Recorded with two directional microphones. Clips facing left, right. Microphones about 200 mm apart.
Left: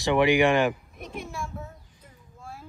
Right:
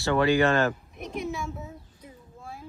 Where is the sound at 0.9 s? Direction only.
Centre (ahead or behind).